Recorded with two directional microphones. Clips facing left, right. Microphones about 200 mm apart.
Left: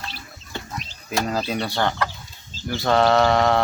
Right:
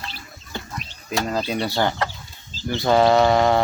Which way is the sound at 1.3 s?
5° left (ahead or behind).